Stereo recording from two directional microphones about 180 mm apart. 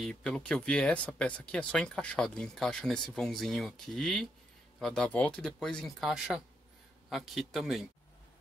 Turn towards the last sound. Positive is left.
turn(degrees=0)  # may be behind; listen again after turning